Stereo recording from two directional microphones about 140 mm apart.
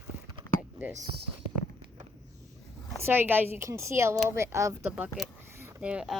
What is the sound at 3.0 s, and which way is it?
Speech, 15° right (ahead or behind).